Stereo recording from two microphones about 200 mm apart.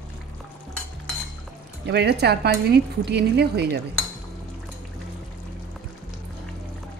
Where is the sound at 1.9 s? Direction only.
55° right (ahead or behind).